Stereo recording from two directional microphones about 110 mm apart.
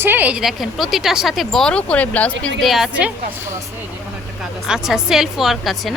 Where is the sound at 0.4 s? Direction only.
Centre (ahead or behind).